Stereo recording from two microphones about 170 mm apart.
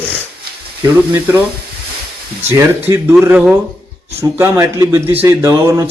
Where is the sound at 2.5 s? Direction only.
15° right (ahead or behind).